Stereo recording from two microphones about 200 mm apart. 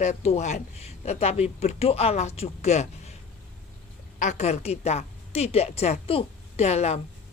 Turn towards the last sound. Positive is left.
turn(degrees=30)  # may be behind; listen again after turning